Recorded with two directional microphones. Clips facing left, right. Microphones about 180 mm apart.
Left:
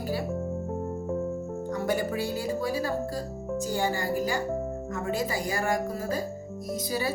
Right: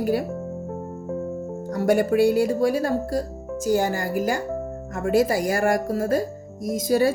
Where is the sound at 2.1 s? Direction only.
50° right (ahead or behind).